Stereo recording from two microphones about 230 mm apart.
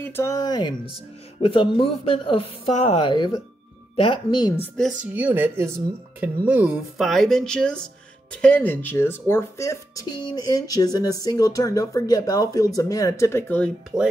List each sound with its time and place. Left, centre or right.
0.0 s speech: centre
4.7 s speech: centre
13.9 s speech: centre